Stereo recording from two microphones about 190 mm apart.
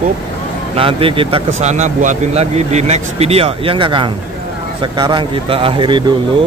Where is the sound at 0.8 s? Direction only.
30° right (ahead or behind).